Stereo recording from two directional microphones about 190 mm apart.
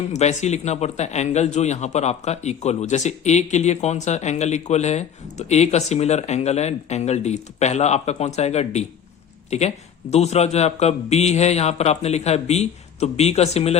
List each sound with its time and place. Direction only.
0.1 s a man's voice: 35° left (ahead or behind)